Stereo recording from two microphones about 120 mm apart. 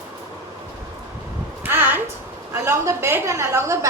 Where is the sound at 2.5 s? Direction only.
20° right (ahead or behind).